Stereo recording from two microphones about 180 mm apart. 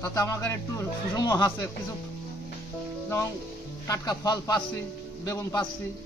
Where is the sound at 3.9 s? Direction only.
20° left (ahead or behind).